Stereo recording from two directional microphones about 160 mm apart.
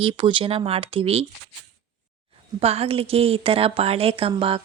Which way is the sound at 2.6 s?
40° right (ahead or behind).